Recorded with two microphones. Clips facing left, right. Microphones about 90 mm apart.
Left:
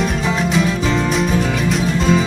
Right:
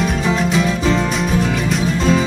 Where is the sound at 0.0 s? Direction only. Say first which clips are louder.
Right 1 dB; centre (ahead or behind).